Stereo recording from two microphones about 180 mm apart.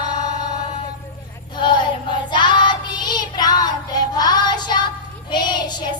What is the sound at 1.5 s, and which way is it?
Child singing, 25° left (ahead or behind).